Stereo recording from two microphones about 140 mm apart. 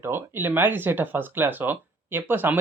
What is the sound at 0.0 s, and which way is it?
Speech, 15° right (ahead or behind).